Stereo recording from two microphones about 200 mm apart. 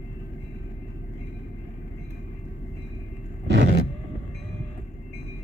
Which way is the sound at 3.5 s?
60° right (ahead or behind).